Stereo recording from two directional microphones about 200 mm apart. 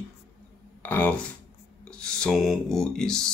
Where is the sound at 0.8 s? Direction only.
10° left (ahead or behind).